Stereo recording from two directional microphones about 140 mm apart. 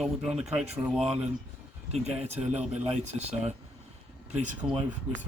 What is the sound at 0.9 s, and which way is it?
Speech, 5° right (ahead or behind).